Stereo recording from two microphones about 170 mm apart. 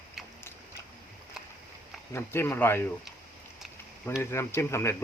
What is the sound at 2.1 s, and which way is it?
Speech, 15° left (ahead or behind).